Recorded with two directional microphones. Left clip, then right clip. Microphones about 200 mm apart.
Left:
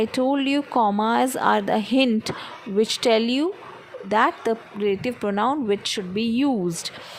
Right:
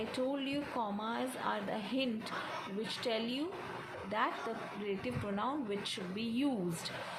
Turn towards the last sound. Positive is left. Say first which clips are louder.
# left 13 dB
turn(degrees=45)  # may be behind; listen again after turning